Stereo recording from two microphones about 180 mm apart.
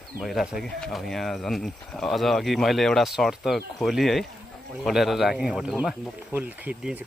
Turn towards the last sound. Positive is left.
turn(degrees=-10)  # may be behind; listen again after turning